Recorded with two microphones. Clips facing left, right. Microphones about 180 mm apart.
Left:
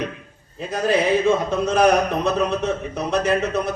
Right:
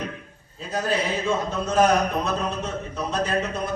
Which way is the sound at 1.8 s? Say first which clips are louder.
Left 2 dB; 70° left (ahead or behind).